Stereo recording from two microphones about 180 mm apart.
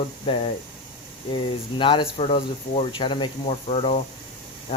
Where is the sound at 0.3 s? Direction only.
30° left (ahead or behind).